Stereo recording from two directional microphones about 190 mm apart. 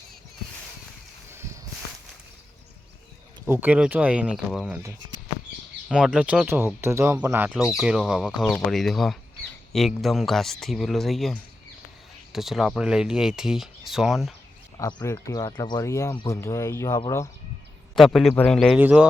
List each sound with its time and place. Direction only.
3.4 s speech: 10° right (ahead or behind)
5.9 s speech: 5° right (ahead or behind)
14.8 s speech: 20° left (ahead or behind)
17.9 s speech: centre (ahead or behind)
18.8 s speech: 10° right (ahead or behind)